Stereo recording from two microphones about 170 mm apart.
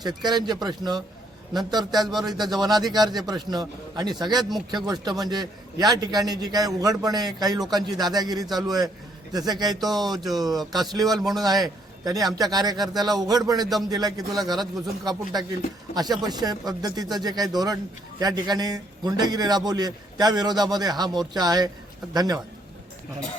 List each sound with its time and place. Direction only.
0.0 s a man's voice: 25° right (ahead or behind)
2.2 s a man's voice: 25° right (ahead or behind)
11.2 s speech: centre (ahead or behind)
11.4 s a man's voice: 25° right (ahead or behind)